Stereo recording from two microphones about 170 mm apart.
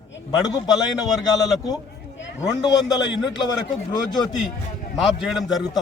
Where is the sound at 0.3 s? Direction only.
20° left (ahead or behind).